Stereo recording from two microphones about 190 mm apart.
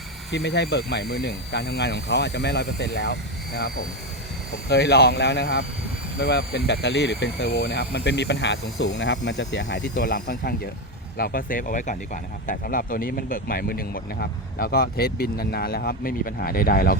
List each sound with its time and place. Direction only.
0.3 s speech: 65° left (ahead or behind)
4.7 s speech: 60° left (ahead or behind)
9.9 s speech: 50° left (ahead or behind)